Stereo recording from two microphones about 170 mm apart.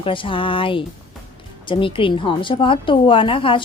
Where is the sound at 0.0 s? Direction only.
30° left (ahead or behind).